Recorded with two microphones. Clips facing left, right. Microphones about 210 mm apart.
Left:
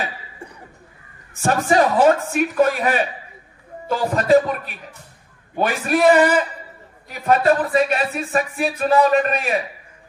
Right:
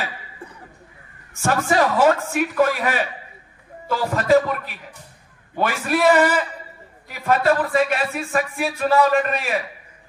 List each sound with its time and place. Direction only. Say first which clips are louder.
1.4 s speech: left 2 dB; 20° left (ahead or behind)
5.6 s speech: left 2 dB; 20° left (ahead or behind)